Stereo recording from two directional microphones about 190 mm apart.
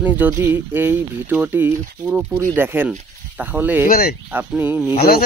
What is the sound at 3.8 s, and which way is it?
Speech, 50° left (ahead or behind).